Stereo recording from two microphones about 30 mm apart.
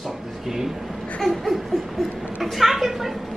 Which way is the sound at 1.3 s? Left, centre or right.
Centre.